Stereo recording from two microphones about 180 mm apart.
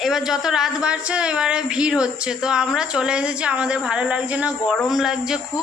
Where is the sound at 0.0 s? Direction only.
Centre (ahead or behind).